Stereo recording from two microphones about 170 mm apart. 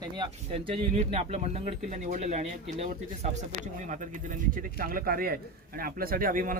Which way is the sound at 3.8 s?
45° right (ahead or behind).